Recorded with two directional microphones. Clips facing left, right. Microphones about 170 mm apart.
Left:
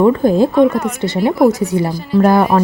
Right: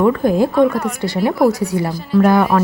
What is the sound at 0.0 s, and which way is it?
Speech, 25° left (ahead or behind).